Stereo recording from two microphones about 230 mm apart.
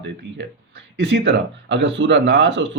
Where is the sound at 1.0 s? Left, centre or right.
Right.